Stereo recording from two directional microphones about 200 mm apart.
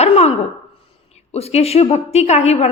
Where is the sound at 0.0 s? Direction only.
30° left (ahead or behind).